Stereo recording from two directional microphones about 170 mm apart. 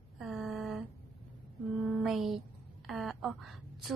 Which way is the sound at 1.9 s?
Centre (ahead or behind).